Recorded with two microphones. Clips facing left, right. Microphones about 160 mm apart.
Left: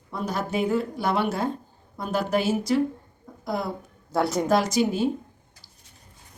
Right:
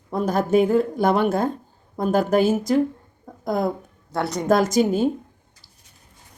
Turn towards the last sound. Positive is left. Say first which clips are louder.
# right 4 dB
turn(degrees=-50)  # may be behind; listen again after turning